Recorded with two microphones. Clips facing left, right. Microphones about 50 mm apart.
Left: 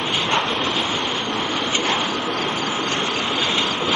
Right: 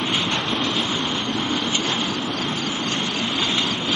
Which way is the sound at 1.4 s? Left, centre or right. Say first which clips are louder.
Left 1 dB; left.